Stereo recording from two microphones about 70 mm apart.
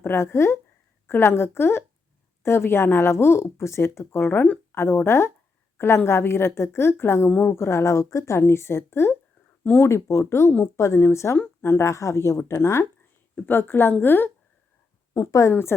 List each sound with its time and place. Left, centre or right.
0.0 s a woman's voice: left
7.3 s a woman's voice: left
7.5 s speech: left
15.1 s a woman's voice: left